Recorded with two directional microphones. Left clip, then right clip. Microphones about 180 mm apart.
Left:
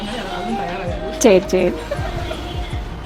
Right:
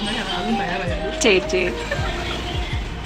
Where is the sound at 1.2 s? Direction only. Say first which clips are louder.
Left 5 dB; 45° left (ahead or behind).